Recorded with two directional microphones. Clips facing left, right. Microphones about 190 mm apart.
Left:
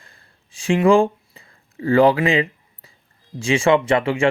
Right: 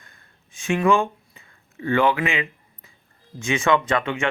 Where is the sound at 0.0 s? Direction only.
30° left (ahead or behind).